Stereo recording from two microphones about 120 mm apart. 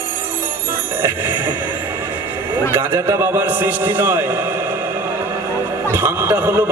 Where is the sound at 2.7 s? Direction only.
20° right (ahead or behind).